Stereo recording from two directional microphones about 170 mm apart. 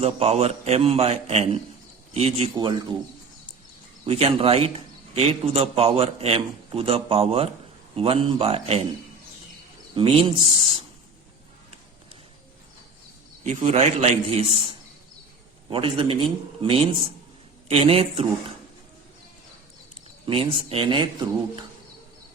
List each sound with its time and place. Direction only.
0.0 s a man's voice: 35° right (ahead or behind)
4.0 s a man's voice: 35° right (ahead or behind)
9.9 s a man's voice: 30° right (ahead or behind)
13.4 s a man's voice: 40° right (ahead or behind)
15.7 s a man's voice: 30° right (ahead or behind)
20.2 s a man's voice: 30° right (ahead or behind)